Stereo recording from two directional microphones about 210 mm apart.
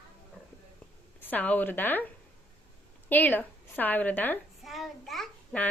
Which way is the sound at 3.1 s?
10° left (ahead or behind).